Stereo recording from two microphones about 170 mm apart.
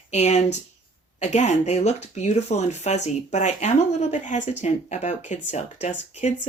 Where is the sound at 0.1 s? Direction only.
40° left (ahead or behind).